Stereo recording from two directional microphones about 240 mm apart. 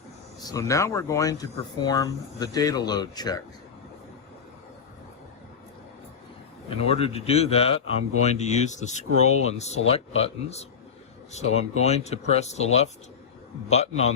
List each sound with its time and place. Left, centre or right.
0.3 s speech: centre
6.8 s speech: left